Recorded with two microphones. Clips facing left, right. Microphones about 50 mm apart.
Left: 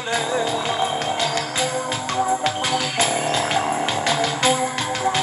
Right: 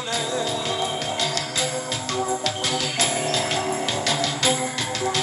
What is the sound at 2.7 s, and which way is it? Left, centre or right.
Music, left.